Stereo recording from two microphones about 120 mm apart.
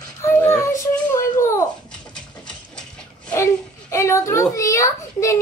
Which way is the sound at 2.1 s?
5° left (ahead or behind).